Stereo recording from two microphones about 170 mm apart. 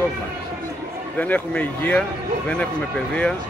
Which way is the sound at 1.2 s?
10° left (ahead or behind).